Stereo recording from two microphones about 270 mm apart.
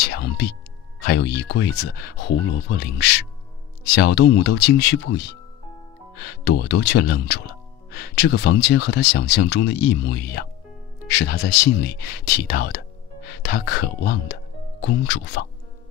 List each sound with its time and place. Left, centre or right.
0.0 s music: left
1.0 s speech: left